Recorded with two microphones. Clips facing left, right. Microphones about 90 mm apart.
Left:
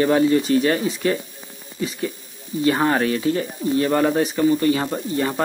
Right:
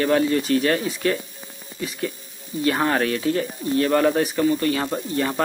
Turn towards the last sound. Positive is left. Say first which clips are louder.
# left 1 dB
turn(degrees=5)  # may be behind; listen again after turning